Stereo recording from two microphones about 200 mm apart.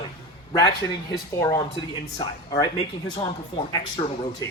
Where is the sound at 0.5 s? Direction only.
20° left (ahead or behind).